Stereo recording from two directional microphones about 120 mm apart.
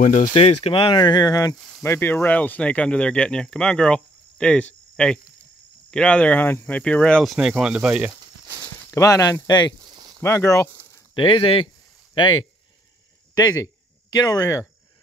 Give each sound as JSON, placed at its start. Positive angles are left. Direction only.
{"t": 0.0, "sound": "speech", "side_deg": 90}
{"t": 0.3, "sound": "speech", "side_deg": 60}
{"t": 0.9, "sound": "speech", "side_deg": 35}
{"t": 1.8, "sound": "speech", "side_deg": 20}
{"t": 8.9, "sound": "speech", "side_deg": 25}
{"t": 9.8, "sound": "a sound", "side_deg": -35}
{"t": 10.2, "sound": "speech", "side_deg": 25}
{"t": 11.1, "sound": "speech", "side_deg": 45}